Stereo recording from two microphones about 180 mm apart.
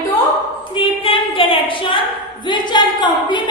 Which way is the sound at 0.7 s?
30° left (ahead or behind).